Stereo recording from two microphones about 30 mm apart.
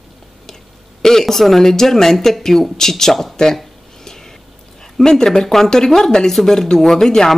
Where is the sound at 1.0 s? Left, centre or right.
Centre.